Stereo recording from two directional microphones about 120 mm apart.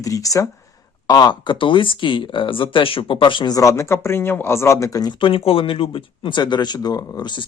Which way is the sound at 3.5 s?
25° left (ahead or behind).